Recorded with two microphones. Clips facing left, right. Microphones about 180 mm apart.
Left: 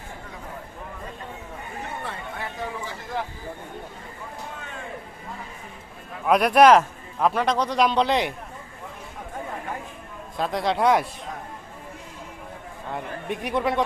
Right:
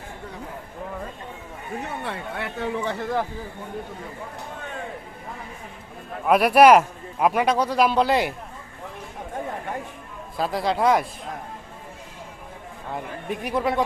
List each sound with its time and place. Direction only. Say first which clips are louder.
2.0 s speech: right 3 dB; 70° right (ahead or behind)
6.2 s a man's voice: right 1 dB; 5° right (ahead or behind)
10.3 s speech: right 1 dB; 5° right (ahead or behind)
12.9 s speech: even; centre (ahead or behind)